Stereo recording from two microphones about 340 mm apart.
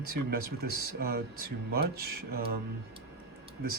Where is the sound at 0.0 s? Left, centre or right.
Right.